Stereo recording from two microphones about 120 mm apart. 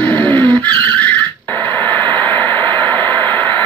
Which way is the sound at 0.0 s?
15° left (ahead or behind).